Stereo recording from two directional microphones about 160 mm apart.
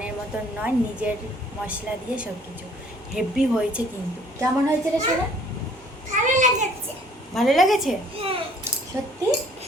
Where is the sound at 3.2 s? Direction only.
5° right (ahead or behind).